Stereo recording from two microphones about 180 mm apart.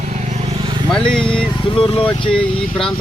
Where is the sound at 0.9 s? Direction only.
5° left (ahead or behind).